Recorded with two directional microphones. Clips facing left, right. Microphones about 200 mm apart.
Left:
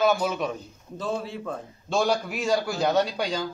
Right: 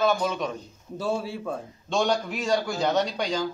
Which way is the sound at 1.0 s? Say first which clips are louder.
Right 2 dB; 10° right (ahead or behind).